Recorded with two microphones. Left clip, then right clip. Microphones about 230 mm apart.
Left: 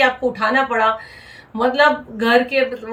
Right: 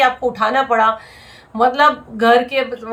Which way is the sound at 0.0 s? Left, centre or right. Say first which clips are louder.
Right 2 dB; centre.